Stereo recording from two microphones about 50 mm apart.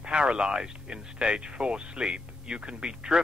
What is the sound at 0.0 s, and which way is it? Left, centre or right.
Speech, centre.